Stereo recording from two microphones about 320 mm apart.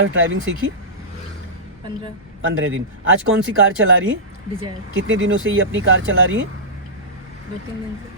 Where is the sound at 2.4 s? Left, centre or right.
Right.